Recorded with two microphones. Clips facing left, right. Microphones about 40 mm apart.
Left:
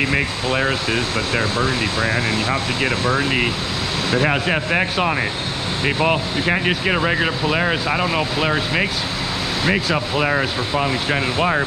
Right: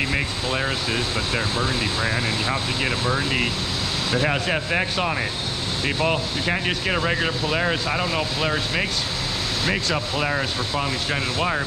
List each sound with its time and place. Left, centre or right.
0.0 s speech: left